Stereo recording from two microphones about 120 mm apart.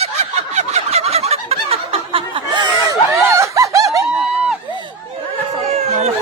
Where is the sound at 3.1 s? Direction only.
25° right (ahead or behind).